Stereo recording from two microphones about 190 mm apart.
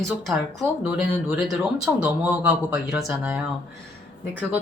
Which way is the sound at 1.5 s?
5° right (ahead or behind).